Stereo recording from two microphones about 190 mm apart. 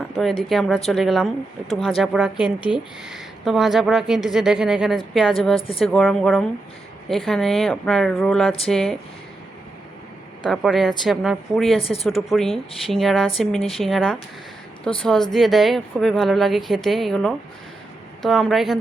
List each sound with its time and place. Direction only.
0.2 s a woman's voice: centre (ahead or behind)
5.5 s a woman's voice: 30° left (ahead or behind)
5.8 s a woman's voice: 5° left (ahead or behind)
10.4 s a woman's voice: centre (ahead or behind)
11.8 s speech: 30° left (ahead or behind)
12.0 s a woman's voice: centre (ahead or behind)